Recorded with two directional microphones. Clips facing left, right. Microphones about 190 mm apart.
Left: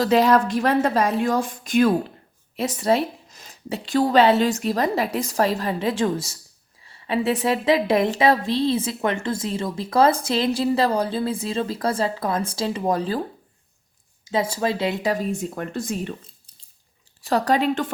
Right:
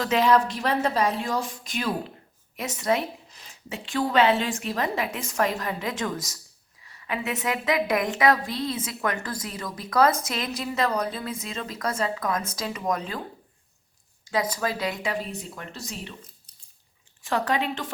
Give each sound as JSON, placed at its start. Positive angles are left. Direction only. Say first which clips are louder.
{"t": 0.0, "sound": "speech", "louder": "left 4 dB", "side_deg": 35}
{"t": 2.6, "sound": "a woman's voice", "louder": "left 5 dB", "side_deg": 35}
{"t": 14.3, "sound": "a woman's voice", "louder": "left 4 dB", "side_deg": 25}
{"t": 15.0, "sound": "speech", "louder": "left 7 dB", "side_deg": 45}
{"t": 17.2, "sound": "a woman's voice", "louder": "left 5 dB", "side_deg": 35}